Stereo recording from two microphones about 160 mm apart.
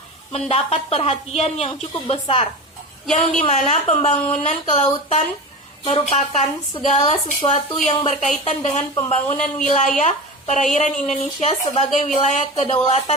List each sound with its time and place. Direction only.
0.3 s a woman's voice: 40° left (ahead or behind)
3.1 s a woman's voice: 45° left (ahead or behind)